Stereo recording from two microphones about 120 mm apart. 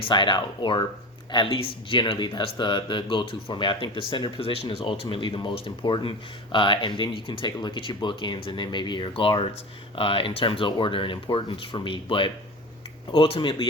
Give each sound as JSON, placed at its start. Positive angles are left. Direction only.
{"t": 0.0, "sound": "speech", "side_deg": 40}